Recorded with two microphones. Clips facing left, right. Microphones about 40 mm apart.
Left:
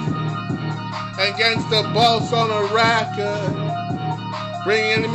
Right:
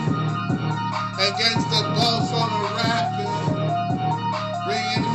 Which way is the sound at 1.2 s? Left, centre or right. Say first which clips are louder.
Left 4 dB; left.